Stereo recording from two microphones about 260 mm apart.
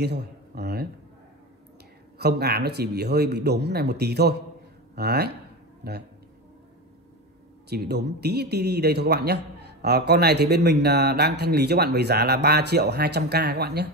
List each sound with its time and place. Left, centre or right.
0.0 s speech: right
2.1 s a man's voice: right
7.7 s a man's voice: right